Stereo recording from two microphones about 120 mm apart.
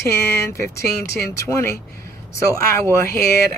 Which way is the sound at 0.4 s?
25° left (ahead or behind).